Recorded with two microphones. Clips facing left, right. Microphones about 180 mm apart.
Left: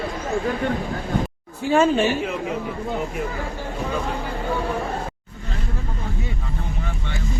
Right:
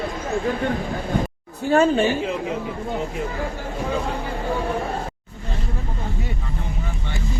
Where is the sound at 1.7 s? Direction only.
35° right (ahead or behind).